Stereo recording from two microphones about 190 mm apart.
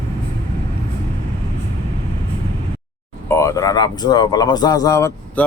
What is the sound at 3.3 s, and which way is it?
A man's voice, 15° left (ahead or behind).